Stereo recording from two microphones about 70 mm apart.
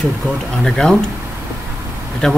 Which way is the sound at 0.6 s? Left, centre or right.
Centre.